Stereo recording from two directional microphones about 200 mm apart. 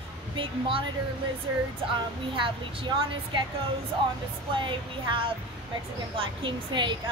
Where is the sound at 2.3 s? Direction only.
25° right (ahead or behind).